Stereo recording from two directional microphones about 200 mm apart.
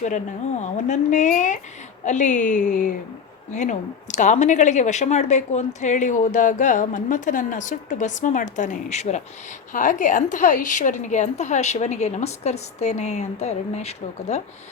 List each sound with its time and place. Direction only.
0.6 s speech: 40° left (ahead or behind)